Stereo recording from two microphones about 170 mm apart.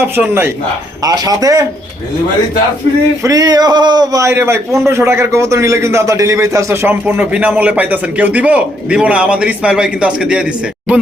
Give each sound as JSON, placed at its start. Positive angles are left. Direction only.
{"t": 0.0, "sound": "a man's voice", "side_deg": -15}
{"t": 3.2, "sound": "a man's voice", "side_deg": -20}